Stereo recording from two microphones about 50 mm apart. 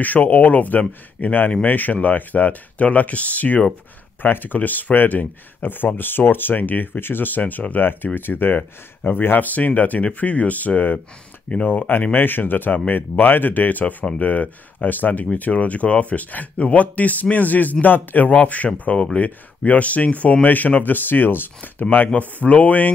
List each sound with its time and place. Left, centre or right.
0.0 s speech: left
11.9 s speech: left
22.4 s speech: left